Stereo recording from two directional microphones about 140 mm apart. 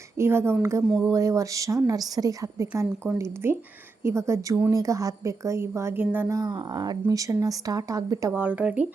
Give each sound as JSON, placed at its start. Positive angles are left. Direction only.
{"t": 0.2, "sound": "a woman's voice", "side_deg": -15}
{"t": 0.9, "sound": "speech", "side_deg": 0}
{"t": 1.1, "sound": "a woman's voice", "side_deg": -20}
{"t": 8.3, "sound": "speech", "side_deg": -10}